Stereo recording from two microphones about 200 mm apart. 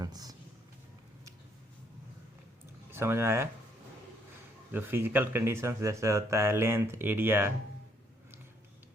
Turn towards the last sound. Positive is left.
turn(degrees=-10)  # may be behind; listen again after turning